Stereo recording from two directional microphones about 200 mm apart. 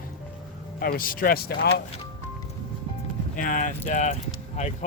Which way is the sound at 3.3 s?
40° left (ahead or behind).